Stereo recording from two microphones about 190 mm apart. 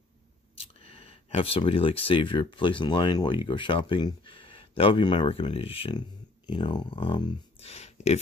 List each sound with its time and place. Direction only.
0.6 s speech: 30° left (ahead or behind)